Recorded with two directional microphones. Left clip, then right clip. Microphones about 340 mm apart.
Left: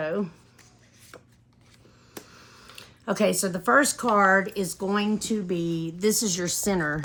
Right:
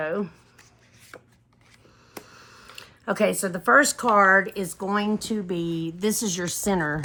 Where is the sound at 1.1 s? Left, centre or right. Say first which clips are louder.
Right 3 dB; centre.